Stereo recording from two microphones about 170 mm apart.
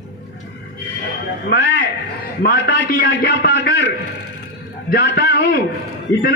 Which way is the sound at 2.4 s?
60° left (ahead or behind).